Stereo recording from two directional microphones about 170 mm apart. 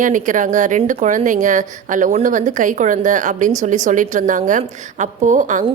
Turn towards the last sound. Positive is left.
turn(degrees=-45)  # may be behind; listen again after turning